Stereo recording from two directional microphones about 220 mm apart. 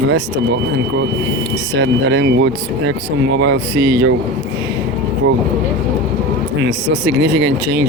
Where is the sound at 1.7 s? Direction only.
55° right (ahead or behind).